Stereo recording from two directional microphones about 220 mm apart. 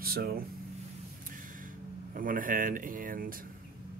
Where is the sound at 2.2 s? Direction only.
40° right (ahead or behind).